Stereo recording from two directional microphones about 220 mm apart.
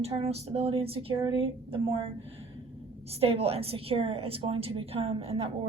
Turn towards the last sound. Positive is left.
turn(degrees=-25)  # may be behind; listen again after turning